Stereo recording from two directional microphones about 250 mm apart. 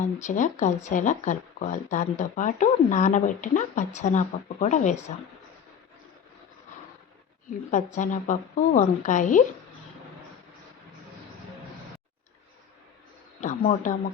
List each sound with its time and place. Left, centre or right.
0.0 s speech: left
7.7 s speech: left
13.4 s a sound: left